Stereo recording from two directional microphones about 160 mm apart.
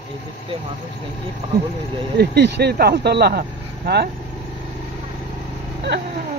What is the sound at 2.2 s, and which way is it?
Speech, 90° right.